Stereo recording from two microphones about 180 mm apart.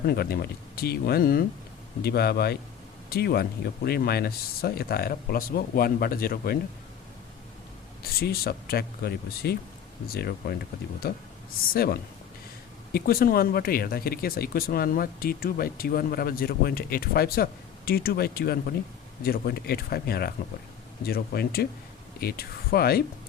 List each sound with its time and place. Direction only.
0.0 s speech: 60° left (ahead or behind)
8.2 s speech: 60° left (ahead or behind)
11.7 s speech: 55° left (ahead or behind)